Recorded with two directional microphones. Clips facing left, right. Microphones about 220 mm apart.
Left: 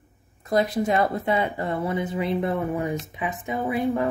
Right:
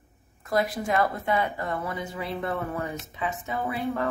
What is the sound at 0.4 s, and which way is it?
Speech, 20° left (ahead or behind).